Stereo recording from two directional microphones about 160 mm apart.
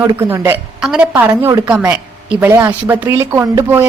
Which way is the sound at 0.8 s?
5° right (ahead or behind).